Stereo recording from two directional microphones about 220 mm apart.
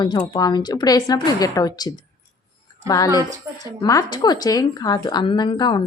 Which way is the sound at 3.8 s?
15° left (ahead or behind).